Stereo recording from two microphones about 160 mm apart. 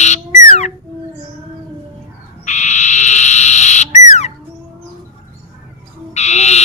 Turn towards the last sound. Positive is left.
turn(degrees=45)  # may be behind; listen again after turning